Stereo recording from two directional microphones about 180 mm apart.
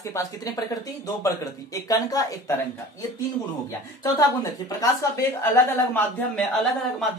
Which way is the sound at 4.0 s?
20° left (ahead or behind).